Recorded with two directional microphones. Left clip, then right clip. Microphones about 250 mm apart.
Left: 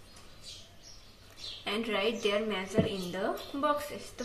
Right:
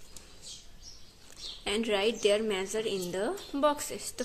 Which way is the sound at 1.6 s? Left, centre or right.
Right.